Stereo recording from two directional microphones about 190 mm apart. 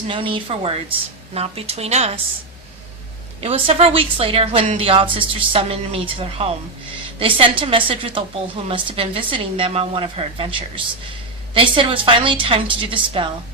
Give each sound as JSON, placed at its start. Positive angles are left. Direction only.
{"t": 0.1, "sound": "a woman's voice", "side_deg": -25}
{"t": 3.4, "sound": "a woman's voice", "side_deg": -30}